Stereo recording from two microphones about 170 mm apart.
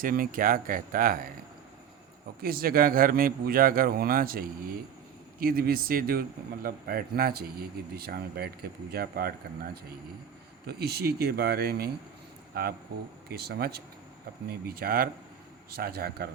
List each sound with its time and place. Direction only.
0.0 s speech: 55° right (ahead or behind)
2.4 s speech: 60° right (ahead or behind)
10.7 s speech: 70° right (ahead or behind)